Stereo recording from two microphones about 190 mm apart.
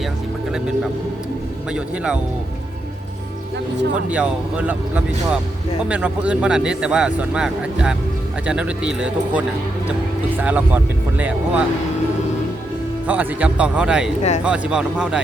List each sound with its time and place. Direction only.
4.1 s speech: 5° right (ahead or behind)
10.4 s speech: 10° right (ahead or behind)
13.1 s speech: 5° right (ahead or behind)
14.2 s speech: 35° left (ahead or behind)
14.4 s speech: 5° right (ahead or behind)